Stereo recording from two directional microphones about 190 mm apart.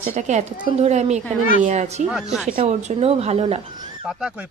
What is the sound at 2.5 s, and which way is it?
A woman's voice, 30° right (ahead or behind).